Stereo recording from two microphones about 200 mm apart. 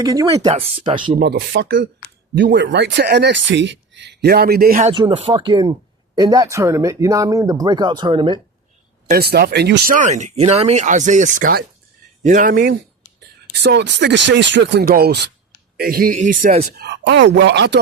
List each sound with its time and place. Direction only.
0.0 s speech: 20° right (ahead or behind)
1.1 s speech: 55° right (ahead or behind)
4.8 s speech: 25° right (ahead or behind)
9.0 s speech: 50° right (ahead or behind)
13.1 s speech: 60° right (ahead or behind); by 16.6 s 35° right (ahead or behind)
16.7 s speech: 55° right (ahead or behind)